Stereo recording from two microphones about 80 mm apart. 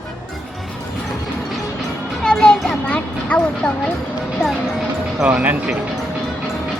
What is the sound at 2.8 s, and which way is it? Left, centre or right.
Vehicle, centre.